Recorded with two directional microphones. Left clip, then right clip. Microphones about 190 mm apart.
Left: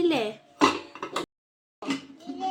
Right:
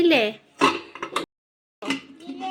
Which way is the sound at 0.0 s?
20° right (ahead or behind).